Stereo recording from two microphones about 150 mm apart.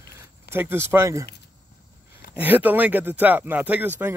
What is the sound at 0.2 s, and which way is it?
Speech, 15° right (ahead or behind).